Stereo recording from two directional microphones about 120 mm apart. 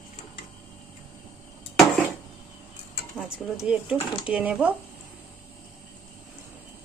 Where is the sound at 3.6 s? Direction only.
10° right (ahead or behind).